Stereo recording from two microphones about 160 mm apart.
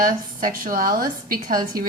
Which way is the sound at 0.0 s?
60° right (ahead or behind).